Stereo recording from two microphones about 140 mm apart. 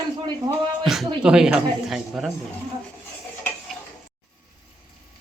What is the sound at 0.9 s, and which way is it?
A man's voice, 5° right (ahead or behind).